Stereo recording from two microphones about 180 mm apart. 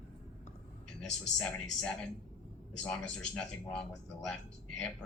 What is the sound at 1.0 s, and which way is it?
Speech, 5° left (ahead or behind).